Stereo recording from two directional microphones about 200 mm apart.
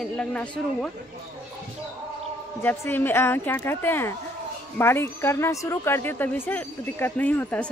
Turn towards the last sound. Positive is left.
turn(degrees=5)  # may be behind; listen again after turning